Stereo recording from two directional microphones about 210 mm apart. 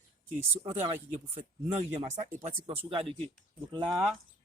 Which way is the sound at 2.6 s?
25° right (ahead or behind).